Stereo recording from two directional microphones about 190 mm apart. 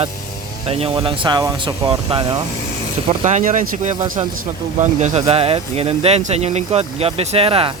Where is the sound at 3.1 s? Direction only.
40° right (ahead or behind).